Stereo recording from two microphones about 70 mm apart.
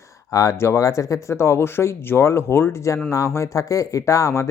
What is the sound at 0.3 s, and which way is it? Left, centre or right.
Speech, left.